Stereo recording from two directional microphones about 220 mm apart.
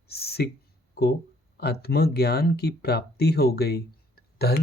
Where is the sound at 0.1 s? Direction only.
45° left (ahead or behind).